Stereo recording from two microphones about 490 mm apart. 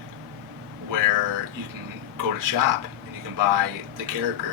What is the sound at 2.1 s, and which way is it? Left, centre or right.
A man's voice, right.